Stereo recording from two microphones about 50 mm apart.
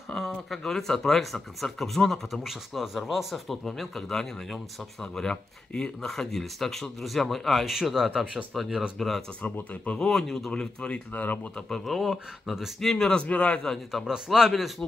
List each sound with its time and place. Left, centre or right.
0.1 s a sound: centre
0.5 s speech: centre
2.4 s speech: centre
9.4 s speech: left
9.9 s speech: centre
10.5 s speech: left
11.7 s speech: centre
12.9 s speech: centre
13.6 s speech: centre
14.0 s a man's voice: centre